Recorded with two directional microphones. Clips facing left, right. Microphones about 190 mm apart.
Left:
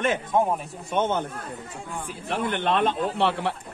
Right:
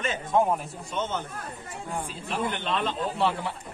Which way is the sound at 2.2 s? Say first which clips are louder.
Left 6 dB; 60° left (ahead or behind).